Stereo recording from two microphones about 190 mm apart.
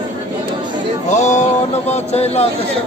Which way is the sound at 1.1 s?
40° left (ahead or behind).